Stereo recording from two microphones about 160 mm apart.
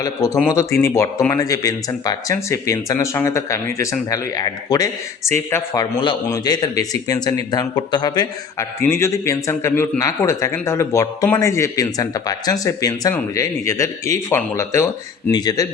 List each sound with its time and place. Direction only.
0.0 s speech: 20° left (ahead or behind)